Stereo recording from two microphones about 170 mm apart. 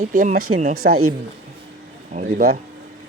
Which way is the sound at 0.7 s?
65° right (ahead or behind).